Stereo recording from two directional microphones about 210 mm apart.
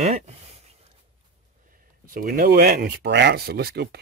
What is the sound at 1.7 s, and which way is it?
Speech, 45° right (ahead or behind).